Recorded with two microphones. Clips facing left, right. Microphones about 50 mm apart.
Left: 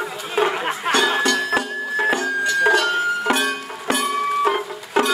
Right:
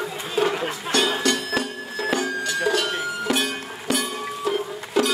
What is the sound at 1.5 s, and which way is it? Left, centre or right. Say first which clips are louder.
Music: left 4 dB; left.